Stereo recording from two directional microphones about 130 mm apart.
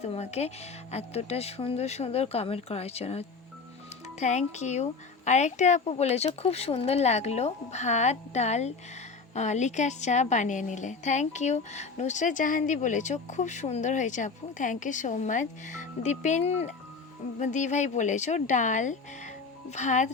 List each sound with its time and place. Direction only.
0.0 s speech: 55° left (ahead or behind)
4.2 s a woman's voice: 65° left (ahead or behind)
17.4 s a woman's voice: 70° left (ahead or behind)